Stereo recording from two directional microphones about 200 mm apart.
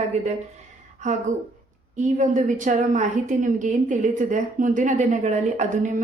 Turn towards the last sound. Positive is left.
turn(degrees=-35)  # may be behind; listen again after turning